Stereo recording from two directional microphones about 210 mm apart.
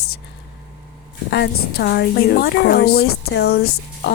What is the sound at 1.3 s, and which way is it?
A woman's voice, 50° left (ahead or behind).